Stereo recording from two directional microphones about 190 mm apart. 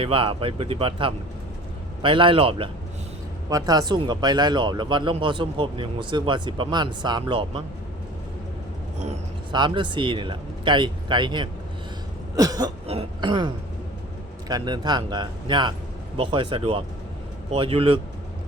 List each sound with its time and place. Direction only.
0.0 s speech: 30° right (ahead or behind)
9.5 s speech: 25° right (ahead or behind)